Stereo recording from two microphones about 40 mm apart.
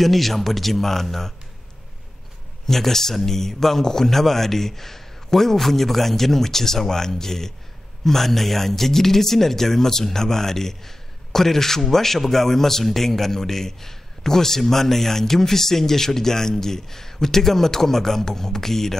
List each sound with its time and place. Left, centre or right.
0.0 s speech: centre
2.6 s speech: centre